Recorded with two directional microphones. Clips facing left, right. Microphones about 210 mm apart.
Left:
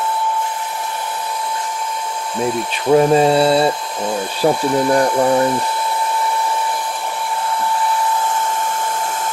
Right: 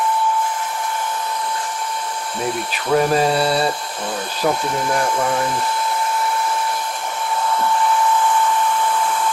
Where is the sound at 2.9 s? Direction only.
25° left (ahead or behind).